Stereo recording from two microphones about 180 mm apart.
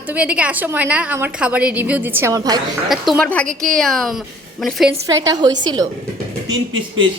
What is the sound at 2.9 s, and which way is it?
A woman's voice, 5° left (ahead or behind).